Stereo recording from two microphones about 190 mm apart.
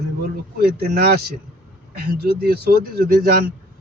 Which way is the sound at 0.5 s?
55° right (ahead or behind).